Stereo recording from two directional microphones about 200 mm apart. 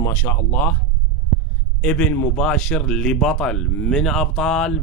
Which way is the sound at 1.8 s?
5° left (ahead or behind).